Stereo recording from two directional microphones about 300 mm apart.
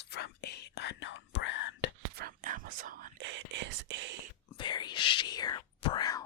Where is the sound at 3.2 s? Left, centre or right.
Right.